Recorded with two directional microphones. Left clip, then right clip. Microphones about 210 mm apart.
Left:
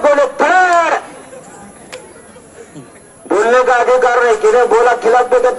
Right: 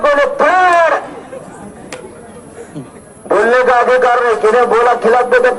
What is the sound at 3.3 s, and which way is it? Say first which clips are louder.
A man's voice: right 1 dB; 30° left (ahead or behind).